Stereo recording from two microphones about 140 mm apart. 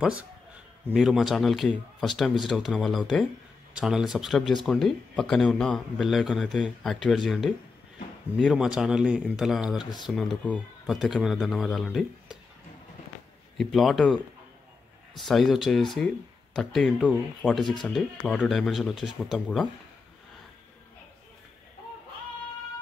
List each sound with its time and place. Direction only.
0.9 s a man's voice: 5° right (ahead or behind)
9.8 s speech: 30° left (ahead or behind)
10.1 s a man's voice: 5° left (ahead or behind)
13.6 s a man's voice: centre (ahead or behind)